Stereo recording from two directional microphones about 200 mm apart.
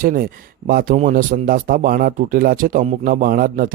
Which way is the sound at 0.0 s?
45° right (ahead or behind).